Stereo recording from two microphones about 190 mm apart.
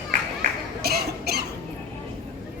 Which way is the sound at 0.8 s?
55° right (ahead or behind).